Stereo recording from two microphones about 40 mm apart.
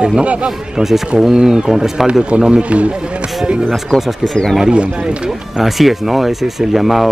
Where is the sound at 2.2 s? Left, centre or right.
Right.